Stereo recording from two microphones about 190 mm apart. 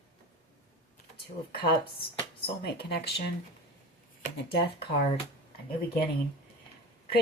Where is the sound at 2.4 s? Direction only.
55° left (ahead or behind).